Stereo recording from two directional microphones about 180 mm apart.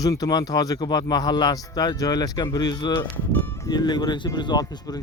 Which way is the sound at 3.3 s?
10° left (ahead or behind).